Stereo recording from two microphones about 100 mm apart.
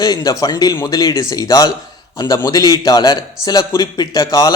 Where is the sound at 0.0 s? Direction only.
40° left (ahead or behind).